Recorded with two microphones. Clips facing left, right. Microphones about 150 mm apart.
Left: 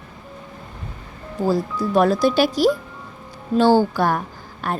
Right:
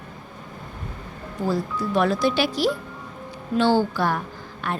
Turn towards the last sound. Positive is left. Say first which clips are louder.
# left 3 dB
turn(degrees=40)  # may be behind; listen again after turning